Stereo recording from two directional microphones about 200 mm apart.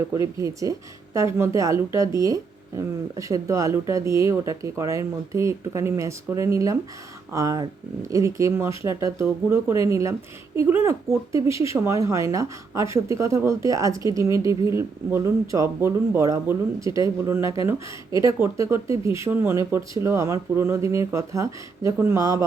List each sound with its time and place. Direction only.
0.1 s speech: 15° right (ahead or behind)